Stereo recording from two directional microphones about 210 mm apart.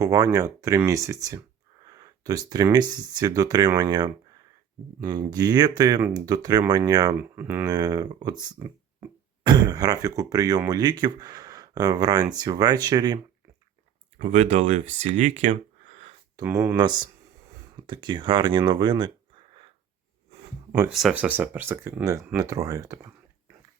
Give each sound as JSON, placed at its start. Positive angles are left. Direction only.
{"t": 0.0, "sound": "speech", "side_deg": -15}
{"t": 14.2, "sound": "speech", "side_deg": -30}
{"t": 16.4, "sound": "speech", "side_deg": -15}
{"t": 20.7, "sound": "speech", "side_deg": -5}